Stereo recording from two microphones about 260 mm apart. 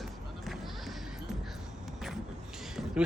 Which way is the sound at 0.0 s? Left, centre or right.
Centre.